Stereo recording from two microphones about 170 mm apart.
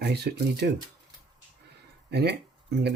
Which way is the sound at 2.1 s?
75° right (ahead or behind).